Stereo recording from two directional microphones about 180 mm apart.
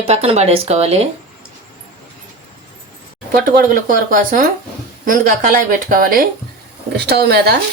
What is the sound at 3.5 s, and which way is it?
A woman's voice, 50° right (ahead or behind).